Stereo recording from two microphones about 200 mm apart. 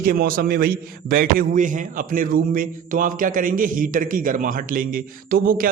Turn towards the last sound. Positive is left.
turn(degrees=-45)  # may be behind; listen again after turning